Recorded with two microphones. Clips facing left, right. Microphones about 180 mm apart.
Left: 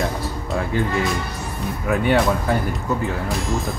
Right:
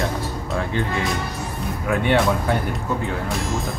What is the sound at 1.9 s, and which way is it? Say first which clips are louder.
Speech: left 1 dB; centre (ahead or behind).